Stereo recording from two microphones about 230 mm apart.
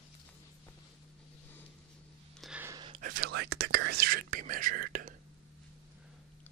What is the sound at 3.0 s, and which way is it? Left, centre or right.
Whispering, right.